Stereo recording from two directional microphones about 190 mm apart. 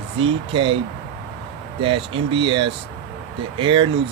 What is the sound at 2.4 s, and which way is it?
Speech, 25° right (ahead or behind).